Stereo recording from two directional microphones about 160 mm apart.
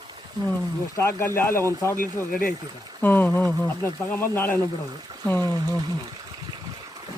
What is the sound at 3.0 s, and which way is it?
Speech, 10° left (ahead or behind).